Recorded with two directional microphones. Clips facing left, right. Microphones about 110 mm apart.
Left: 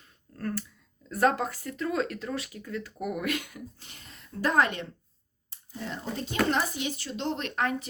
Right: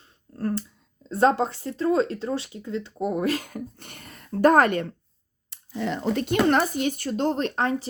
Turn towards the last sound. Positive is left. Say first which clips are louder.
# right 5 dB
turn(degrees=-30)  # may be behind; listen again after turning